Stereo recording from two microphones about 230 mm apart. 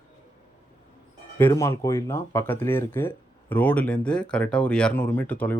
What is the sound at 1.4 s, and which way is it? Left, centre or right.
Speech, centre.